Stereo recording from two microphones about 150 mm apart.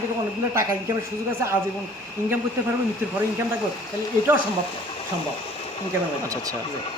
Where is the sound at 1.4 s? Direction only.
20° right (ahead or behind).